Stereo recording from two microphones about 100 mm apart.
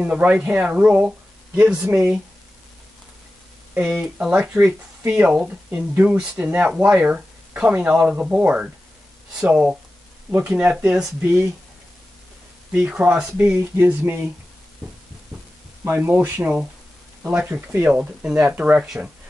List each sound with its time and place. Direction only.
0.0 s speech: 15° right (ahead or behind)
3.7 s speech: 10° right (ahead or behind)
10.5 s speech: 15° right (ahead or behind)
12.8 s speech: 15° right (ahead or behind)
15.8 s speech: 20° right (ahead or behind)
17.2 s speech: 10° right (ahead or behind)
17.5 s speech: 20° right (ahead or behind)